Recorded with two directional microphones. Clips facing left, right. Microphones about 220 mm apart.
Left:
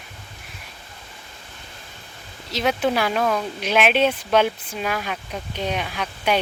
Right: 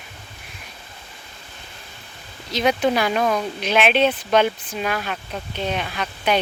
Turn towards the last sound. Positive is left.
turn(degrees=10)  # may be behind; listen again after turning